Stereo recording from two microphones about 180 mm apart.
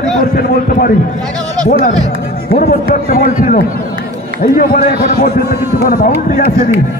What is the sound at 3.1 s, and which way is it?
A man's voice, 45° left (ahead or behind).